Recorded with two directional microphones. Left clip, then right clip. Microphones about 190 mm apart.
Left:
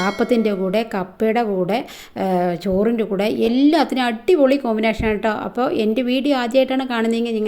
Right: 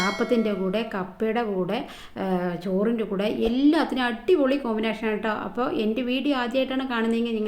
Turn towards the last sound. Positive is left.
turn(degrees=40)  # may be behind; listen again after turning